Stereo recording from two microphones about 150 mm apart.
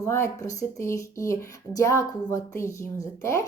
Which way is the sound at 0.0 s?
20° left (ahead or behind).